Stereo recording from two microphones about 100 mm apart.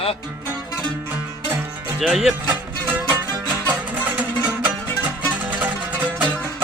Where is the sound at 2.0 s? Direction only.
5° right (ahead or behind).